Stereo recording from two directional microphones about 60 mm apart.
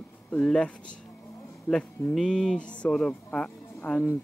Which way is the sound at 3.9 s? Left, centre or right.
Left.